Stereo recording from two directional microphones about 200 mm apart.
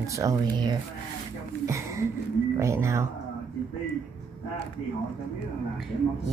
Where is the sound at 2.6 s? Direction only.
15° right (ahead or behind).